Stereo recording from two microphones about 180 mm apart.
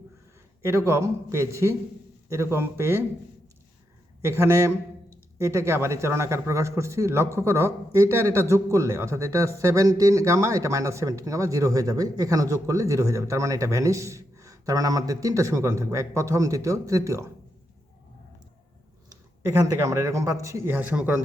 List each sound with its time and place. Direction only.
0.6 s a man's voice: 15° right (ahead or behind)
4.2 s a man's voice: 15° right (ahead or behind)
19.4 s a man's voice: 20° right (ahead or behind)